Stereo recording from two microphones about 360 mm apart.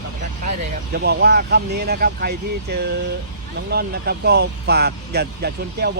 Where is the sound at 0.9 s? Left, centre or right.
Right.